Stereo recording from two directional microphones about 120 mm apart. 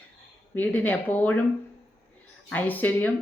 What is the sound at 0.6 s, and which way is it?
Speech, 15° left (ahead or behind).